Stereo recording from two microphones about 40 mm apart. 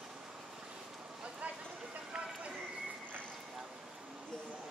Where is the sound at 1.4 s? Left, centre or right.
Right.